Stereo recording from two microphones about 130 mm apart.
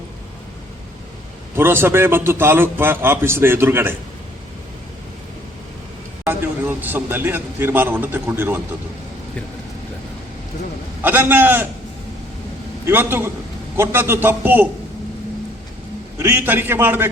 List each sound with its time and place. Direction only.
1.5 s a man's voice: 20° right (ahead or behind)
6.2 s a man's voice: 15° right (ahead or behind)
11.0 s a man's voice: 15° right (ahead or behind)
12.8 s a man's voice: 15° right (ahead or behind)
16.1 s a man's voice: 20° right (ahead or behind)